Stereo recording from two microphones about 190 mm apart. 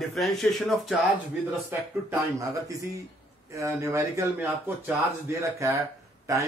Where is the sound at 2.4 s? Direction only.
15° right (ahead or behind).